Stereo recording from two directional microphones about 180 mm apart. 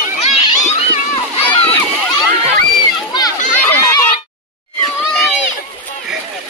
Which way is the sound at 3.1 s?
20° left (ahead or behind).